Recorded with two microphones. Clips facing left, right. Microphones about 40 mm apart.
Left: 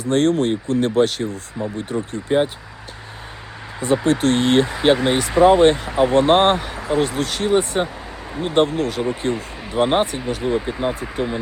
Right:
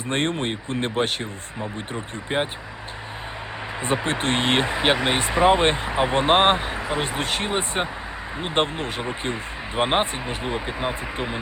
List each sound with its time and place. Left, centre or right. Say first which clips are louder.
0.0 s speech: left 7 dB; right
3.8 s speech: left 7 dB; right